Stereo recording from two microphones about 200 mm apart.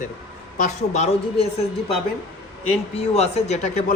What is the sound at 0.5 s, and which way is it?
Speech, 35° left (ahead or behind).